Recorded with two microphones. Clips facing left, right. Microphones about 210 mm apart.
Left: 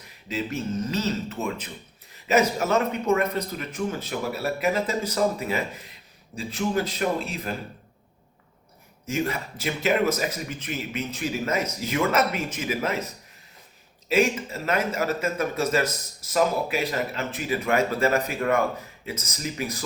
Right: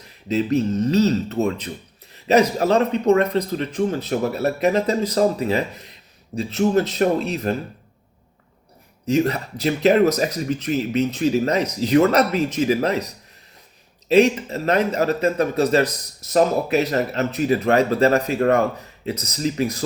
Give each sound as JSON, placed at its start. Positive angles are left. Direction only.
{"t": 0.3, "sound": "speech", "side_deg": -35}
{"t": 9.0, "sound": "speech", "side_deg": -35}